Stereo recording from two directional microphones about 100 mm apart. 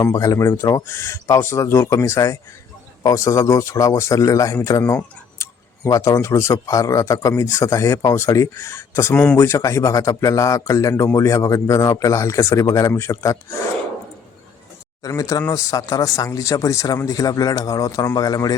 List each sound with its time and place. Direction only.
0.0 s speech: 35° left (ahead or behind)
4.8 s a man's voice: 20° left (ahead or behind)
5.4 s speech: 30° left (ahead or behind)
9.1 s speech: 15° left (ahead or behind)
9.4 s a man's voice: 30° left (ahead or behind)
15.0 s speech: 35° left (ahead or behind)